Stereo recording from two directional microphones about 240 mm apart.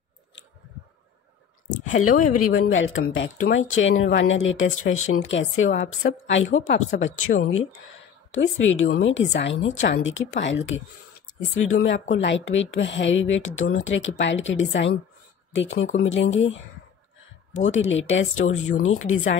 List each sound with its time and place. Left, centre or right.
1.9 s speech: left
2.7 s speech: left
7.3 s speech: left
8.3 s a woman's voice: left
17.6 s speech: left